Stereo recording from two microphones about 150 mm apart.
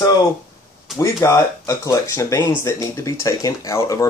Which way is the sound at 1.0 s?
20° left (ahead or behind).